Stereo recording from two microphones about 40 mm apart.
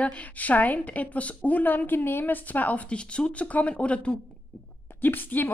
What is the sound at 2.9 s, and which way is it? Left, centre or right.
A woman's voice, left.